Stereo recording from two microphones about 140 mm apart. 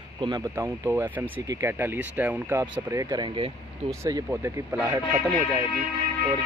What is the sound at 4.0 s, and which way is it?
Speech, 20° right (ahead or behind).